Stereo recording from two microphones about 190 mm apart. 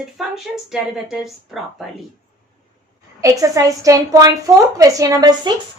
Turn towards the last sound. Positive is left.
turn(degrees=-20)  # may be behind; listen again after turning